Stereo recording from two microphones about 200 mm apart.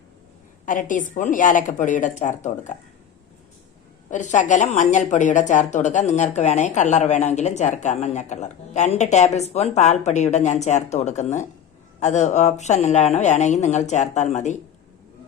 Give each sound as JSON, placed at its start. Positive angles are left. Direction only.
{"t": 0.6, "sound": "a woman's voice", "side_deg": 40}
{"t": 4.1, "sound": "a woman's voice", "side_deg": 40}